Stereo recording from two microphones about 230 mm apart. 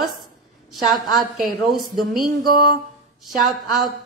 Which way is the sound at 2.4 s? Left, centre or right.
Right.